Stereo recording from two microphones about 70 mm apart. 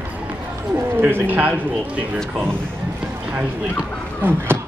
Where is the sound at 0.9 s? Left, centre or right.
Right.